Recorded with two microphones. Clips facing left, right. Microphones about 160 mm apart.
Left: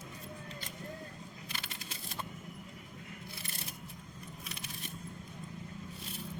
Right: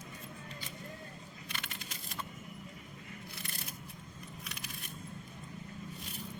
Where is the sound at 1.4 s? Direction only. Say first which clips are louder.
Right 1 dB; 30° left (ahead or behind).